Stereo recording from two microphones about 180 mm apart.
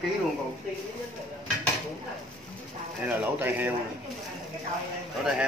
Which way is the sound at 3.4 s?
10° right (ahead or behind).